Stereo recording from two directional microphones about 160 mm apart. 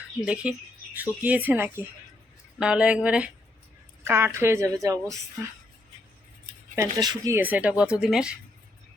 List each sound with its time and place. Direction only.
0.4 s a woman's voice: 5° right (ahead or behind)
6.7 s speech: 20° right (ahead or behind)
7.3 s a woman's voice: 10° right (ahead or behind)